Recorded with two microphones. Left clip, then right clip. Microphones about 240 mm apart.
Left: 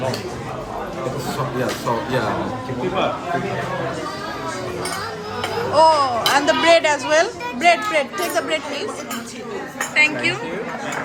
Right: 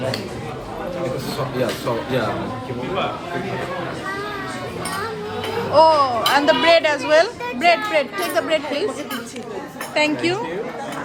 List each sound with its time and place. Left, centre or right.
5.7 s speech: centre
9.9 s a woman's voice: centre